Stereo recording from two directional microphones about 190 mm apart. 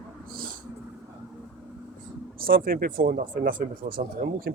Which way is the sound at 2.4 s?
50° right (ahead or behind).